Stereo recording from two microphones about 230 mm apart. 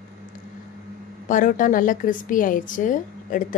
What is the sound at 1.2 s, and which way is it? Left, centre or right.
A woman's voice, left.